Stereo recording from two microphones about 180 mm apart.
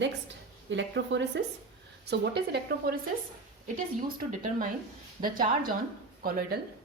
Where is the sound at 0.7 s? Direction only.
85° right.